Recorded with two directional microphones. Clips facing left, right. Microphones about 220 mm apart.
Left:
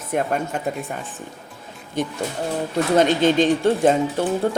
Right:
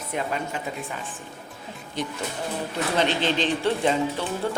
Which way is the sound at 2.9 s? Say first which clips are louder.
Left 8 dB; 45° left (ahead or behind).